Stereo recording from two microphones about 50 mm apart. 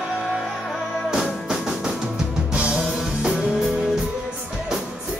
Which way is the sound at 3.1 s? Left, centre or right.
Centre.